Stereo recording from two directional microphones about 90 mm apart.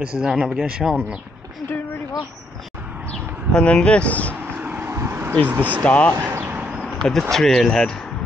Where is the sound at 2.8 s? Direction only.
15° right (ahead or behind).